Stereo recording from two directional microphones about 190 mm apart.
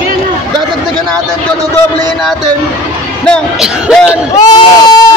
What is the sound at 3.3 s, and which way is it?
Speech, centre (ahead or behind).